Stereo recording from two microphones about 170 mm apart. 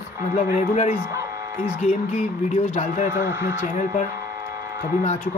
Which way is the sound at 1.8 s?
45° left (ahead or behind).